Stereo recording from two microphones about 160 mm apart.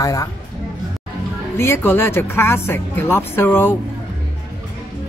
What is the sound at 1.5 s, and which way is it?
Speech, 15° left (ahead or behind).